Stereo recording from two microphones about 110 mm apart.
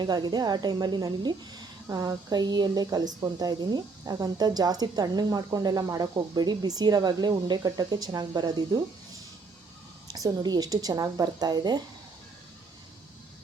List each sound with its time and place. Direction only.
0.0 s a woman's voice: 40° right (ahead or behind)
10.1 s a woman's voice: 35° right (ahead or behind)